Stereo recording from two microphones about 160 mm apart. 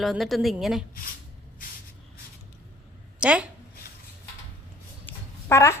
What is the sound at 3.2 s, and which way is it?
Speech, 5° right (ahead or behind).